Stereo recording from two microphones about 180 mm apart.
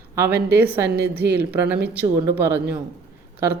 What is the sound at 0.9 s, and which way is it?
Speech, 65° right (ahead or behind).